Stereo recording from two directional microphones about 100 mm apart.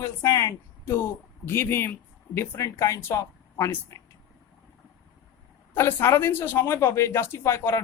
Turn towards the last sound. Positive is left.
turn(degrees=25)  # may be behind; listen again after turning